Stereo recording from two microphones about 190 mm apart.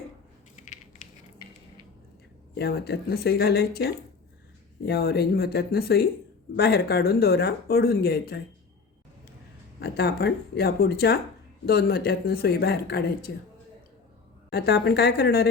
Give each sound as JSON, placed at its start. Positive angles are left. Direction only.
{"t": 2.6, "sound": "speech", "side_deg": 60}
{"t": 9.8, "sound": "speech", "side_deg": 55}
{"t": 14.5, "sound": "speech", "side_deg": 60}